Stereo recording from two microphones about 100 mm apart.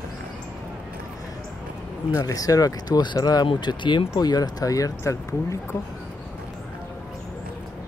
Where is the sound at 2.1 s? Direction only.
35° left (ahead or behind).